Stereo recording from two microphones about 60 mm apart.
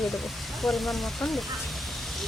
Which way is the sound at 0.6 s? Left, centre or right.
Centre.